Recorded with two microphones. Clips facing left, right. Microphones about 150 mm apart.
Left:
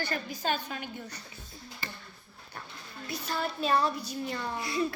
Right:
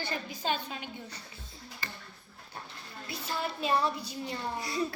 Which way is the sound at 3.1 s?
25° right (ahead or behind).